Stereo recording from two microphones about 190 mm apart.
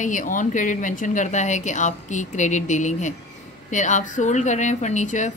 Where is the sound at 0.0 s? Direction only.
45° left (ahead or behind).